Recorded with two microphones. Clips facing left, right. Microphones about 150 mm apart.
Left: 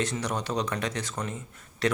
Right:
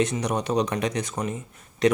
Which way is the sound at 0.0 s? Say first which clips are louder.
Right 5 dB; 20° right (ahead or behind).